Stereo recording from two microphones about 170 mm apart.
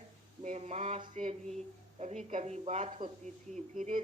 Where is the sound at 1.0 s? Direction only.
45° right (ahead or behind).